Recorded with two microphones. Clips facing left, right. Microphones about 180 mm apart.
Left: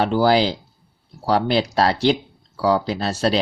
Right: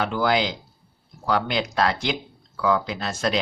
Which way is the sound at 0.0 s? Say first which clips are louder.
Left 6 dB; 35° left (ahead or behind).